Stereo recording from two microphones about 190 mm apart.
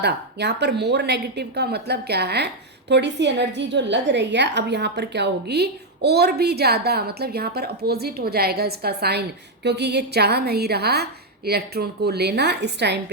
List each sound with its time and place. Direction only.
0.0 s a woman's voice: 65° right (ahead or behind)